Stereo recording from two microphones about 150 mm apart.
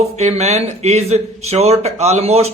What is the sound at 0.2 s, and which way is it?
Speech, 45° right (ahead or behind).